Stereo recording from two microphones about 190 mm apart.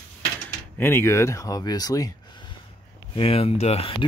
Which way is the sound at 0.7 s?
10° left (ahead or behind).